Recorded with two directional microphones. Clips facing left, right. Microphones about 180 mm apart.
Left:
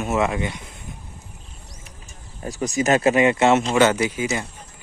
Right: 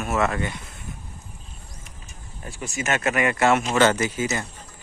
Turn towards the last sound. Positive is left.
turn(degrees=10)  # may be behind; listen again after turning